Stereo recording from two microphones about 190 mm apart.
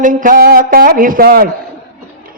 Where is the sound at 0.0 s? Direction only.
45° right (ahead or behind).